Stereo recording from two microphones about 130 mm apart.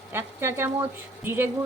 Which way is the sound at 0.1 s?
15° right (ahead or behind).